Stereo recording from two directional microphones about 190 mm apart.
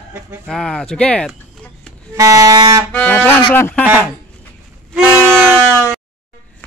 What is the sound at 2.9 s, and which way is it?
Speech, 10° left (ahead or behind).